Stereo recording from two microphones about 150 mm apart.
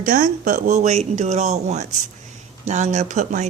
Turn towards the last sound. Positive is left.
turn(degrees=-55)  # may be behind; listen again after turning